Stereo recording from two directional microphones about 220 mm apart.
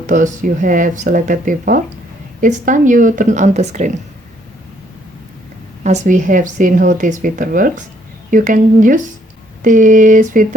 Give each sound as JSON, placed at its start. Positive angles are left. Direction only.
{"t": 0.1, "sound": "a woman's voice", "side_deg": -35}
{"t": 5.8, "sound": "a woman's voice", "side_deg": -30}